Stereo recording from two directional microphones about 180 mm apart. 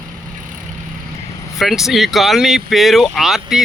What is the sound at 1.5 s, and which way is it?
Speech, centre (ahead or behind).